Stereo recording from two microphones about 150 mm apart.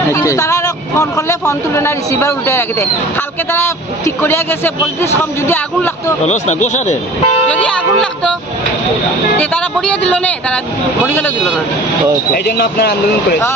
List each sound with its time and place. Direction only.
0.1 s speech: 20° left (ahead or behind)
6.2 s speech: 50° left (ahead or behind)
7.5 s speech: 10° left (ahead or behind)
9.4 s speech: 10° left (ahead or behind)
12.3 s speech: 90° left